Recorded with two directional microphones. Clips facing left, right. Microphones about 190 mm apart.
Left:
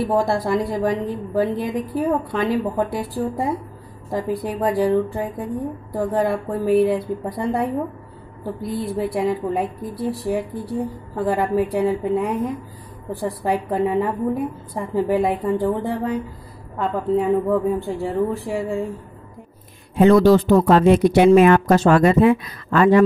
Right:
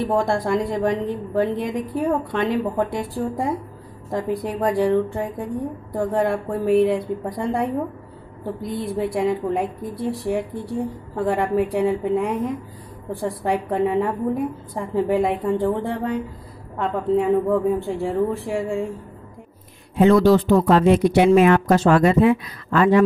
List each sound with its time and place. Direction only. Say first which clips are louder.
0.0 s a woman's voice: left 1 dB; centre (ahead or behind)
20.0 s speech: left 2 dB; 40° left (ahead or behind)